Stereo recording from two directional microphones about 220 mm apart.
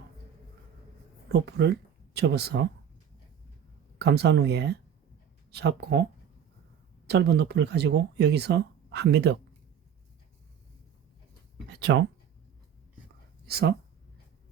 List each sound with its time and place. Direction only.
1.3 s speech: 50° right (ahead or behind)
3.9 s speech: 50° right (ahead or behind)
7.1 s speech: 50° right (ahead or behind)
11.7 s speech: 50° right (ahead or behind)
13.4 s speech: 45° right (ahead or behind)